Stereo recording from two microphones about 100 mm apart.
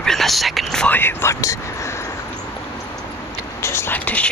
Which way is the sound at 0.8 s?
20° left (ahead or behind).